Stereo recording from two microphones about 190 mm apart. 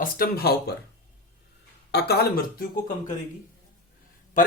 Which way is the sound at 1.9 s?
60° left (ahead or behind).